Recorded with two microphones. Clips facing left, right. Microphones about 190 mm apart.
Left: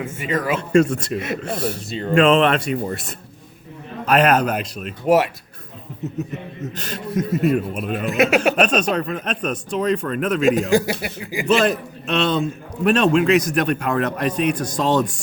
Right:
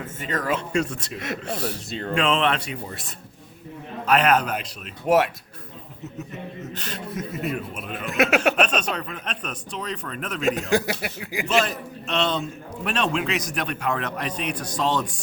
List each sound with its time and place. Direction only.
0.0 s a man's voice: 10° left (ahead or behind)
0.7 s a man's voice: 50° left (ahead or behind)
1.9 s speech: centre (ahead or behind)
2.1 s a man's voice: 50° left (ahead or behind)
4.0 s a man's voice: 45° left (ahead or behind)
5.0 s speech: centre (ahead or behind)
6.7 s a man's voice: 40° left (ahead or behind)
8.0 s speech: centre (ahead or behind)
8.6 s a man's voice: 40° left (ahead or behind)
10.4 s speech: centre (ahead or behind)
11.4 s a man's voice: 60° left (ahead or behind)